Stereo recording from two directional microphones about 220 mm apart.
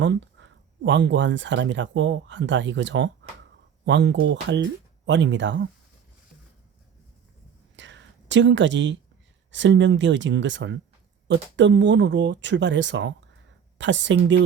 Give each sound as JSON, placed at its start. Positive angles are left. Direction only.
{"t": 0.0, "sound": "speech", "side_deg": -55}
{"t": 7.8, "sound": "whispering", "side_deg": -55}
{"t": 9.5, "sound": "speech", "side_deg": -55}